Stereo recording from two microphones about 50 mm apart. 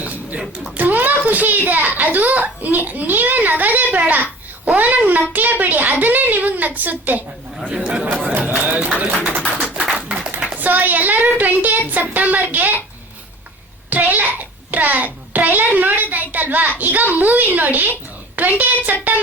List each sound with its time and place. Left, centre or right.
0.8 s a child's voice: right
7.7 s speech: centre
8.4 s a child's voice: right
9.9 s a sound: right
10.6 s a child's voice: right
13.9 s a child's voice: right